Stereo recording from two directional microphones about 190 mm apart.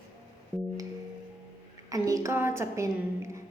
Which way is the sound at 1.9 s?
15° right (ahead or behind).